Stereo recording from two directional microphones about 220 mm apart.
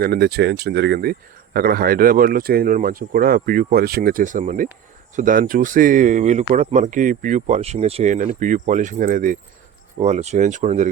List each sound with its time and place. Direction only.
0.0 s speech: 45° right (ahead or behind)